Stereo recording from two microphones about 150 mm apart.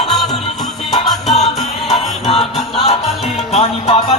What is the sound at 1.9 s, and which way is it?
Music, 40° left (ahead or behind).